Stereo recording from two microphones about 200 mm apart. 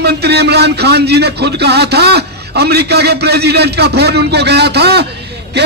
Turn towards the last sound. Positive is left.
turn(degrees=-55)  # may be behind; listen again after turning